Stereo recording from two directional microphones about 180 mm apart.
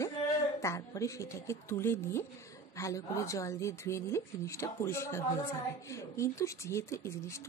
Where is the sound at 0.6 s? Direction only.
15° left (ahead or behind).